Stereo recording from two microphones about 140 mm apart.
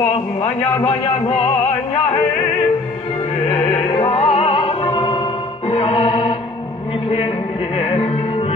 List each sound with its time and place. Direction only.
3.4 s music: 45° left (ahead or behind)
7.7 s music: 40° left (ahead or behind)